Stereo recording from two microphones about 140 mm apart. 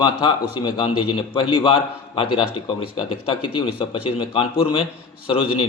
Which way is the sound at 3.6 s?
40° left (ahead or behind).